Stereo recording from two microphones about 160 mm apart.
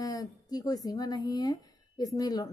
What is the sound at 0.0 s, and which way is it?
Speech, 20° left (ahead or behind).